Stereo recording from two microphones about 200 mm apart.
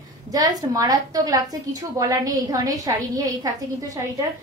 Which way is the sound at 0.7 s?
20° right (ahead or behind).